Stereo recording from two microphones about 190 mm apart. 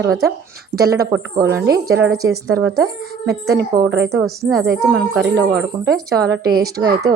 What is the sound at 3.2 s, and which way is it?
Speech, 60° right (ahead or behind).